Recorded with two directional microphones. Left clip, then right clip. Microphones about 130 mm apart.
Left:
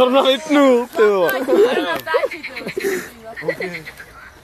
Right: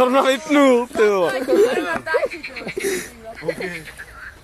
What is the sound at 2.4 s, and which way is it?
Cricket, 15° left (ahead or behind).